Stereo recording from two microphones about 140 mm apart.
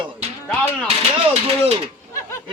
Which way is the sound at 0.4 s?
10° left (ahead or behind).